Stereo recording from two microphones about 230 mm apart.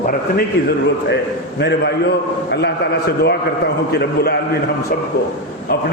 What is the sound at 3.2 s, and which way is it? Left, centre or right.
A man's voice, left.